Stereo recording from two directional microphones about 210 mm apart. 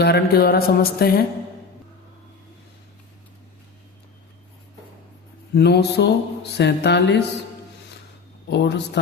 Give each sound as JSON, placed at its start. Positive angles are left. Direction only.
{"t": 0.0, "sound": "mantra", "side_deg": 50}
{"t": 5.5, "sound": "mantra", "side_deg": 50}
{"t": 8.4, "sound": "a man's voice", "side_deg": 55}